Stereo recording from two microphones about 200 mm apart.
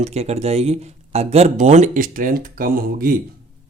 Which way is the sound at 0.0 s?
35° right (ahead or behind).